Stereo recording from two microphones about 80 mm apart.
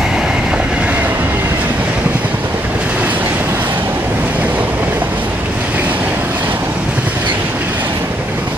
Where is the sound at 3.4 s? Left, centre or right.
Right.